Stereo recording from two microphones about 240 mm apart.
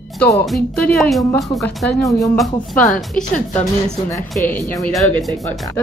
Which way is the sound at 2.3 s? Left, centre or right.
Centre.